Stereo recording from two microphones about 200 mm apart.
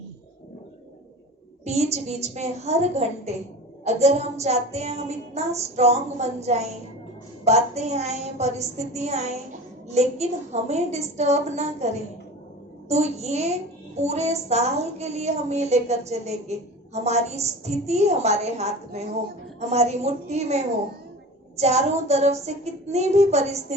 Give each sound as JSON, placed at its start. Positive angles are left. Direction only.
{"t": 1.6, "sound": "a woman's voice", "side_deg": -35}